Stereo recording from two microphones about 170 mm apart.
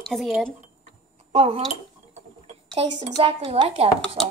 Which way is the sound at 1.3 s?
35° right (ahead or behind).